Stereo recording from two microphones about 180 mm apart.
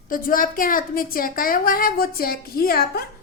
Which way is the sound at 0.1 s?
50° left (ahead or behind).